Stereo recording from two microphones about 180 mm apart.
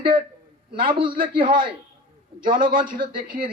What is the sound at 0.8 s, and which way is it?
Speech, 25° right (ahead or behind).